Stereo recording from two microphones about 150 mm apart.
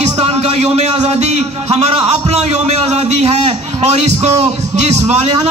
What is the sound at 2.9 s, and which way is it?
A man's voice, 45° right (ahead or behind).